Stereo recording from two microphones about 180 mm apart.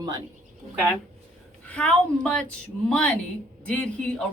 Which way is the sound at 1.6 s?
5° left (ahead or behind).